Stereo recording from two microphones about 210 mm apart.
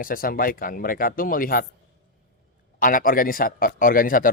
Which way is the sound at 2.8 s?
40° left (ahead or behind).